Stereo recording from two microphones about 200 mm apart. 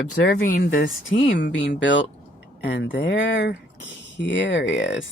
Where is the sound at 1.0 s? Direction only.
70° left (ahead or behind).